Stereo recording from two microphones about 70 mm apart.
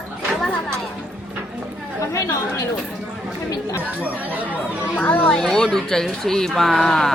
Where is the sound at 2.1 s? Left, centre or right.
Left.